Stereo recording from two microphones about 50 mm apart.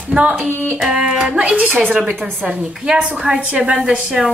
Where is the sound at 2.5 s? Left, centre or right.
Centre.